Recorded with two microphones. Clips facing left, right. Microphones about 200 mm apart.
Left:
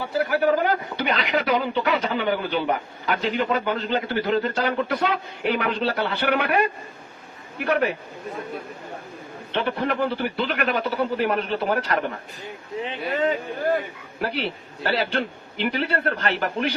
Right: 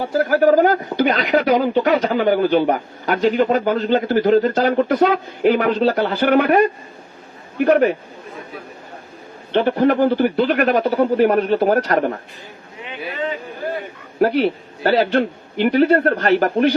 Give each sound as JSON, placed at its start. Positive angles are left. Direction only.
{"t": 0.0, "sound": "speech", "side_deg": -40}
{"t": 9.5, "sound": "speech", "side_deg": -40}
{"t": 14.2, "sound": "speech", "side_deg": -45}